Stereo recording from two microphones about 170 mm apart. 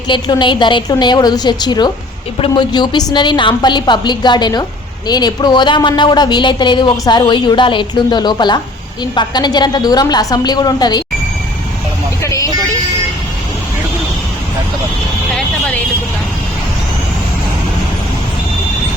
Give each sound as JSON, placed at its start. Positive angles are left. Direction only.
{"t": 0.1, "sound": "a woman's voice", "side_deg": 25}
{"t": 12.2, "sound": "vehicle", "side_deg": 20}